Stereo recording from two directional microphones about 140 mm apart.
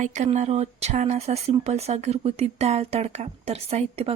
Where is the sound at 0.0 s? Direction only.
60° right (ahead or behind).